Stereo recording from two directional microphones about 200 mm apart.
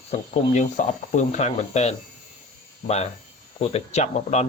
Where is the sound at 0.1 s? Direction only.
35° left (ahead or behind).